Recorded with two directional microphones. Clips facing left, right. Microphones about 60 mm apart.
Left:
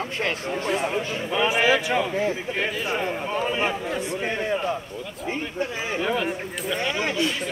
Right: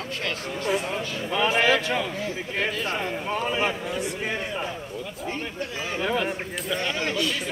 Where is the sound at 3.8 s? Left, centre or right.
Left.